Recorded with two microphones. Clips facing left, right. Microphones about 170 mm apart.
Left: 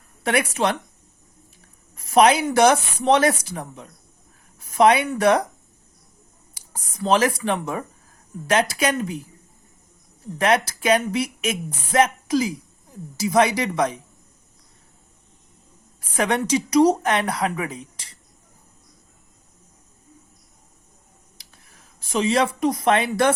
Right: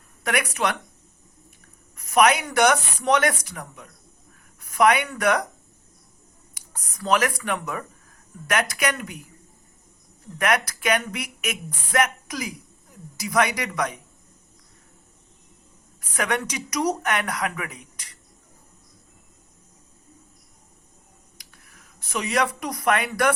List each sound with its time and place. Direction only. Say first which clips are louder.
0.3 s speech: left 4 dB; 30° left (ahead or behind)
2.0 s speech: left 3 dB; 30° left (ahead or behind)
6.5 s speech: left 3 dB; 25° left (ahead or behind)
10.3 s speech: left 4 dB; 30° left (ahead or behind)
16.0 s speech: left 4 dB; 30° left (ahead or behind)
21.3 s a sound: even; 25° left (ahead or behind)